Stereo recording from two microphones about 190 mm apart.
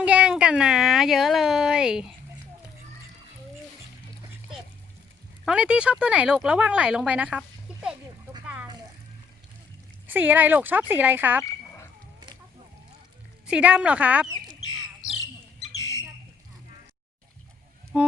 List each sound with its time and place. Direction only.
0.0 s speech: 5° right (ahead or behind)
5.5 s speech: 5° right (ahead or behind)
10.1 s speech: 10° right (ahead or behind)
11.4 s a sound: 15° left (ahead or behind)
13.5 s speech: 5° right (ahead or behind)
15.8 s a sound: 15° left (ahead or behind)
17.9 s speech: 5° right (ahead or behind)